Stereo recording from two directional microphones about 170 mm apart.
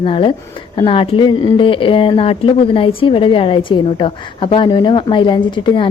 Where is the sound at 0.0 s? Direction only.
30° left (ahead or behind).